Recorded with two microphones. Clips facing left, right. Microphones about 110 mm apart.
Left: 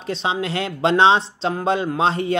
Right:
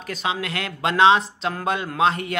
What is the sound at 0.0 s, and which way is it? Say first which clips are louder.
Speech: left 3 dB; 30° left (ahead or behind).